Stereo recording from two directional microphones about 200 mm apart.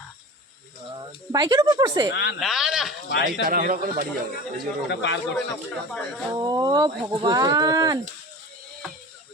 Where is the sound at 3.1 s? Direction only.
60° left (ahead or behind).